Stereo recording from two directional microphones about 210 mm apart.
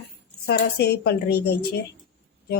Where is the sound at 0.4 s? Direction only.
50° left (ahead or behind).